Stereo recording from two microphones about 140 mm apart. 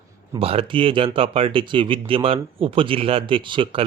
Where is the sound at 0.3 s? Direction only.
40° right (ahead or behind).